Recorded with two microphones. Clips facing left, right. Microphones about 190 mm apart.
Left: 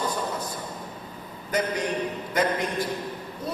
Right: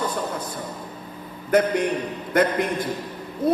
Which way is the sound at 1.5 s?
55° right (ahead or behind).